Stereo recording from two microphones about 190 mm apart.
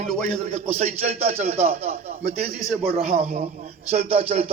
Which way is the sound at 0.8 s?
35° right (ahead or behind).